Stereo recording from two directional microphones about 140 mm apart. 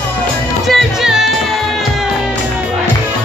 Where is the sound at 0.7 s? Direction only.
Centre (ahead or behind).